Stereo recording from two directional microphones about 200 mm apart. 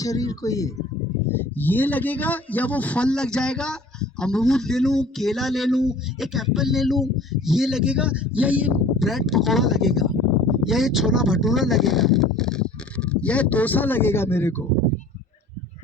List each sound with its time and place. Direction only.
0.0 s speech: 15° left (ahead or behind)